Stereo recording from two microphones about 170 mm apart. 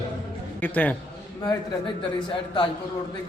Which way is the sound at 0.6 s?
10° left (ahead or behind).